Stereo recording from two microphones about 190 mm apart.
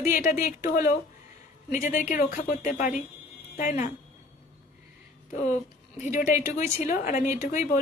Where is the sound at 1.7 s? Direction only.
40° left (ahead or behind).